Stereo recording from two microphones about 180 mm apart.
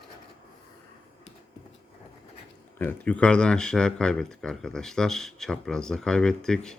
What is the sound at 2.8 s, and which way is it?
Speech, 10° left (ahead or behind).